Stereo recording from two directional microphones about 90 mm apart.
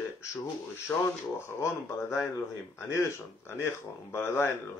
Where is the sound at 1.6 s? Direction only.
30° left (ahead or behind).